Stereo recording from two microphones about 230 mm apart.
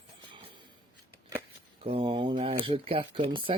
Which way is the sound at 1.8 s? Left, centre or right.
Right.